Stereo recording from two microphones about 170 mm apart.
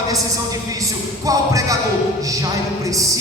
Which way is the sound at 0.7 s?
20° right (ahead or behind).